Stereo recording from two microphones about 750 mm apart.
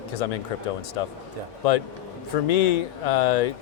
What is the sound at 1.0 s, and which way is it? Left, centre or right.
Speech, left.